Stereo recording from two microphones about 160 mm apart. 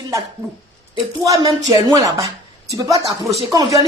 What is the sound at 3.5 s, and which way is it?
Speech, 20° right (ahead or behind).